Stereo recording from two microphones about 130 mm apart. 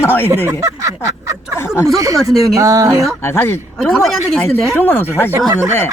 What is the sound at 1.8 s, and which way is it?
Speech, 25° right (ahead or behind).